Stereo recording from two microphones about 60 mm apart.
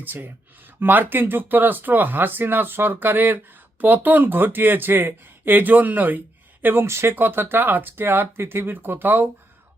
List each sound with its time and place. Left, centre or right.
0.0 s speech: right
6.8 s speech: right